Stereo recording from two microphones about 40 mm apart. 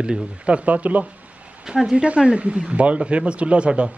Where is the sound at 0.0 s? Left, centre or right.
Right.